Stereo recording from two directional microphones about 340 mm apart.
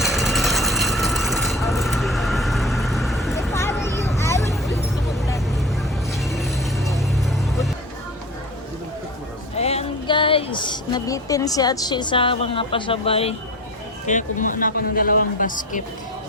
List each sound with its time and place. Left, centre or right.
0.0 s vehicle: centre
6.1 s music: centre
9.6 s speech: centre